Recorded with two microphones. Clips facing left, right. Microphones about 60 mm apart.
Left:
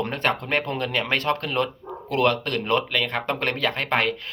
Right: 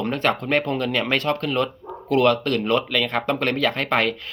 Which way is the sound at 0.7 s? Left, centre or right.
Left.